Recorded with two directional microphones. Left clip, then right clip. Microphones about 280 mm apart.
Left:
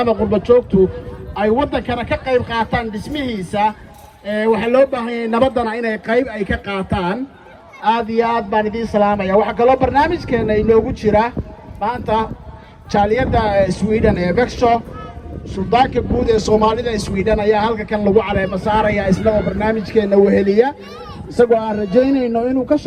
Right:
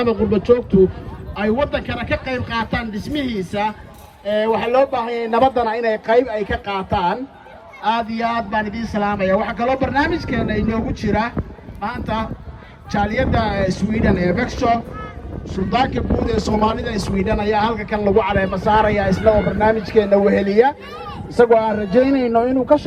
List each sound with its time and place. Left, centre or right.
0.0 s a man's voice: centre; by 22.8 s right